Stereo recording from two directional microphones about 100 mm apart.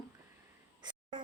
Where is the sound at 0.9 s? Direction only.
45° right (ahead or behind).